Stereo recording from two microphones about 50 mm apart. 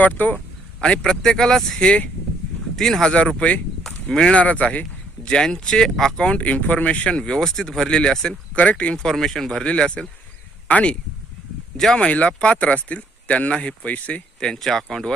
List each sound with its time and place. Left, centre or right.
0.0 s speech: left
0.3 s speech: centre
3.0 s speech: centre
3.8 s a sound: centre
4.4 s speech: left
5.3 s speech: centre
8.5 s speech: left
9.0 s speech: centre
9.5 s speech: centre
11.9 s speech: left
14.3 s speech: centre